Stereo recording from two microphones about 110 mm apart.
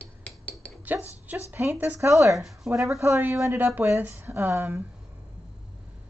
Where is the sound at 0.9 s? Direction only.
15° right (ahead or behind).